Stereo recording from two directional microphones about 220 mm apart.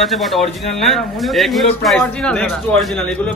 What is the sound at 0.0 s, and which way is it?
Speech, centre (ahead or behind).